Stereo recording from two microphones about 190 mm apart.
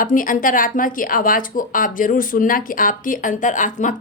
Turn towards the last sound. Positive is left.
turn(degrees=40)  # may be behind; listen again after turning